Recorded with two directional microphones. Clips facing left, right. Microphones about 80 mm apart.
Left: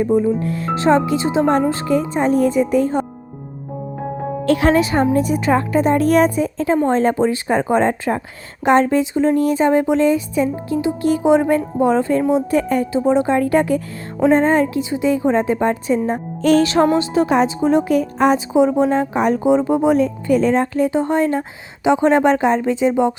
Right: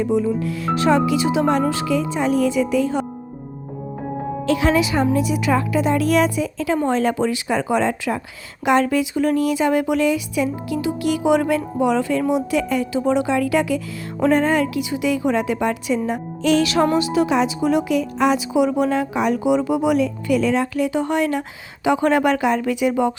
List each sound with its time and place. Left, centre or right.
0.0 s a woman's voice: left
4.4 s a woman's voice: left
14.2 s a woman's voice: left